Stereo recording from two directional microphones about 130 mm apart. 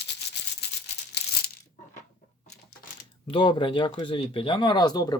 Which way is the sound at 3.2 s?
40° left (ahead or behind).